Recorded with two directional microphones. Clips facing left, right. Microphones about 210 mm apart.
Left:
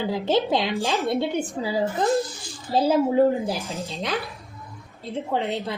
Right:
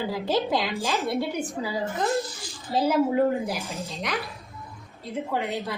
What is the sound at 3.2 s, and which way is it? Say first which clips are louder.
A woman's voice: left 4 dB; 30° left (ahead or behind).